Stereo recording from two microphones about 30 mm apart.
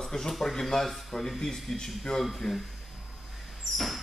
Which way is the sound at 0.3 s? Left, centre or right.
Centre.